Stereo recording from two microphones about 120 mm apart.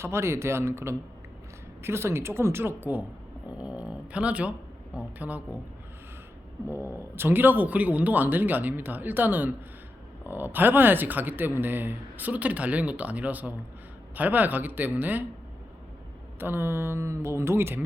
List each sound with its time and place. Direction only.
0.0 s speech: 20° right (ahead or behind)
6.7 s speech: 20° right (ahead or behind)
16.4 s speech: 20° right (ahead or behind)